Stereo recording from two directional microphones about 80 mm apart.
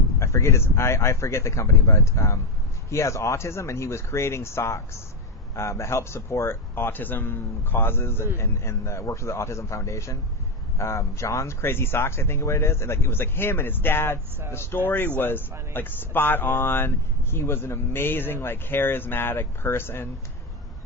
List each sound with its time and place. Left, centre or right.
0.2 s speech: left